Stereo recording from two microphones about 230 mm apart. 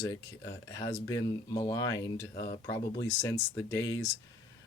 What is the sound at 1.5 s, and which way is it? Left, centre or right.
Speech, centre.